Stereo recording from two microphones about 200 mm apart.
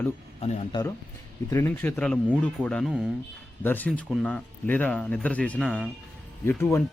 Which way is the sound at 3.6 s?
10° left (ahead or behind).